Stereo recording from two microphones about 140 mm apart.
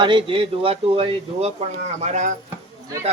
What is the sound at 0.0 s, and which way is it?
Speech, 35° right (ahead or behind).